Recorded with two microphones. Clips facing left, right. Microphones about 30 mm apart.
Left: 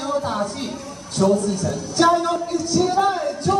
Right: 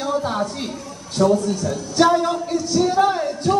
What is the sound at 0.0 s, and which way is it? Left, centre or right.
A woman's voice, centre.